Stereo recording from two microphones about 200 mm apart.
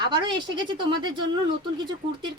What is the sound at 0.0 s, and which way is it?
Speech, 20° right (ahead or behind).